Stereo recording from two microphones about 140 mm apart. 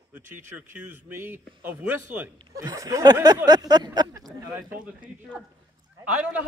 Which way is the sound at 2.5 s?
25° right (ahead or behind).